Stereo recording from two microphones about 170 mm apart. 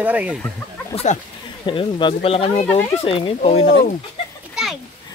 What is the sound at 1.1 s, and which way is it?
Speech, 45° left (ahead or behind).